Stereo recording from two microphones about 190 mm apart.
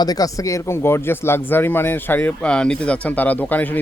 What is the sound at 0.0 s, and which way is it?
Speech, 20° left (ahead or behind).